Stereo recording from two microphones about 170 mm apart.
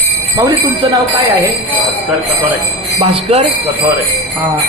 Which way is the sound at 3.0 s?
35° right (ahead or behind).